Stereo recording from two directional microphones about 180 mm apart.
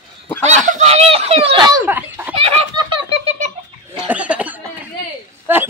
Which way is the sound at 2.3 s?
30° right (ahead or behind).